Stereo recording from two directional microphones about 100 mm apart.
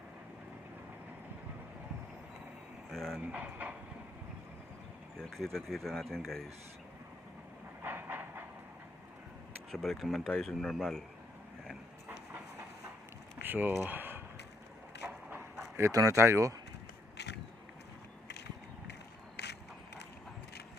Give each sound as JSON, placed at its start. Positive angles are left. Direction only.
{"t": 2.9, "sound": "speech", "side_deg": 5}
{"t": 3.2, "sound": "speech", "side_deg": -15}
{"t": 5.2, "sound": "speech", "side_deg": 5}
{"t": 7.8, "sound": "train", "side_deg": -20}
{"t": 9.7, "sound": "speech", "side_deg": 5}
{"t": 13.4, "sound": "speech", "side_deg": -20}
{"t": 15.0, "sound": "a sound", "side_deg": -20}
{"t": 15.9, "sound": "speech", "side_deg": -35}